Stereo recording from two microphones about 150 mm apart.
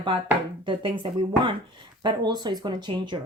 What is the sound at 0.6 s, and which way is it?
Speech, 35° right (ahead or behind).